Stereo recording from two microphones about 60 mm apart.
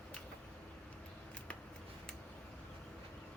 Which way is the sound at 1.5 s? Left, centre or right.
Left.